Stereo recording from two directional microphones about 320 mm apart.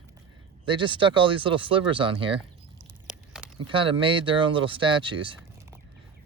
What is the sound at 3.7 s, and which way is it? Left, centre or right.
Speech, centre.